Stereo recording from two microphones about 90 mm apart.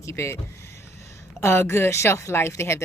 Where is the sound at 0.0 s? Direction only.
30° left (ahead or behind).